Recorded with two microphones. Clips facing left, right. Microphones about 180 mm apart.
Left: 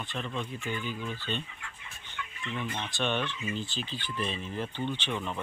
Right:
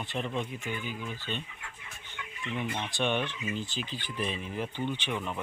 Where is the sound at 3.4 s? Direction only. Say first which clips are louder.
Even; 10° right (ahead or behind).